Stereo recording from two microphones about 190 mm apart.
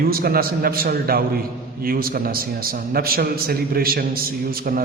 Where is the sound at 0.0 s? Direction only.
50° right (ahead or behind).